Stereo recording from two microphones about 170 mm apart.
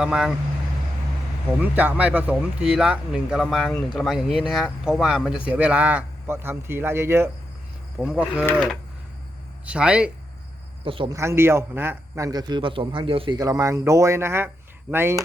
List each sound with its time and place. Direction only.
0.0 s speech: 5° right (ahead or behind)
1.6 s a man's voice: 10° right (ahead or behind)
9.6 s a man's voice: 5° right (ahead or behind)
10.8 s speech: 30° right (ahead or behind)
11.1 s a man's voice: 15° right (ahead or behind)